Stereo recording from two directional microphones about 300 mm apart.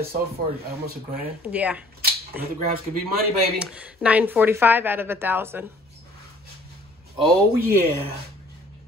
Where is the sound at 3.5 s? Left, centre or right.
Centre.